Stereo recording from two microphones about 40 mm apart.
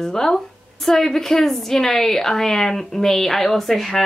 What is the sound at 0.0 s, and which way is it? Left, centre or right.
A woman's voice, centre.